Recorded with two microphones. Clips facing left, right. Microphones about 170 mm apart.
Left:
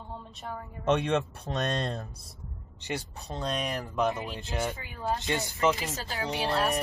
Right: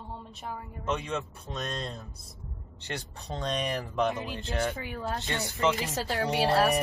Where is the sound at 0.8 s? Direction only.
70° left (ahead or behind).